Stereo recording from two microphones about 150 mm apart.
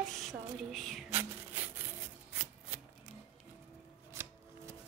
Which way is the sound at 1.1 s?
15° right (ahead or behind).